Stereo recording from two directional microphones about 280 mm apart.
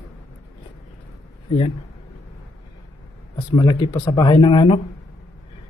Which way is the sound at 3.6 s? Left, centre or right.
Centre.